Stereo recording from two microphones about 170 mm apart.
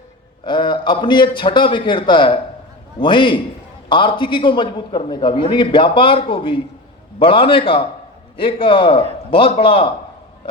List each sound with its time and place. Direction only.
0.4 s a man's voice: 30° left (ahead or behind)